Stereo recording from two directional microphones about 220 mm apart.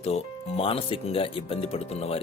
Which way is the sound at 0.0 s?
25° left (ahead or behind).